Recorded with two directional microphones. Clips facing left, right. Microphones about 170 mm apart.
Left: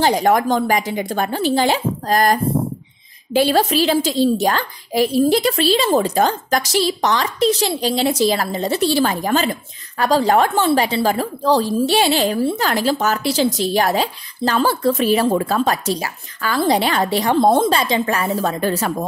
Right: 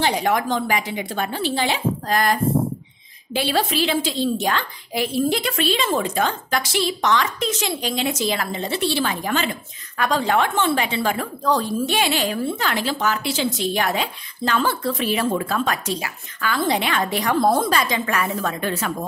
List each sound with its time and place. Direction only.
0.0 s a woman's voice: 40° left (ahead or behind)
3.3 s a woman's voice: 40° left (ahead or behind)